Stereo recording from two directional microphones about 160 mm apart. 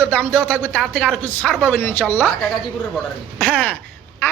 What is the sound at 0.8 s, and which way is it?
Speech, centre (ahead or behind).